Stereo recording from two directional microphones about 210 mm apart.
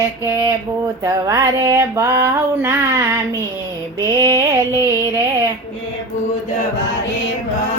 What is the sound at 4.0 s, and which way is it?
Music, 15° right (ahead or behind).